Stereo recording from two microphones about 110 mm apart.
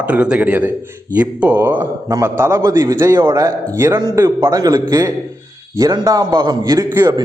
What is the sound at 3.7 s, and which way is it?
Speech, 25° right (ahead or behind).